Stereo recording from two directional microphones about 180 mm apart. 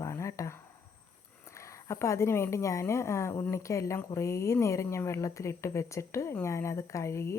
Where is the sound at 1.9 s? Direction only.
15° left (ahead or behind).